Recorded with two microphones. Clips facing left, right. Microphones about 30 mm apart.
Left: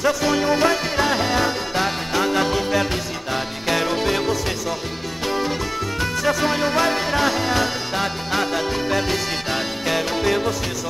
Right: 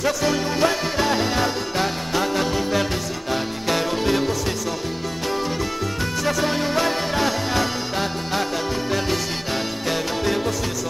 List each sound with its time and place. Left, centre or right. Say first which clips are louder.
0.0 s music: left 2 dB; centre
6.2 s music: left 2 dB; centre
9.5 s music: left 1 dB; centre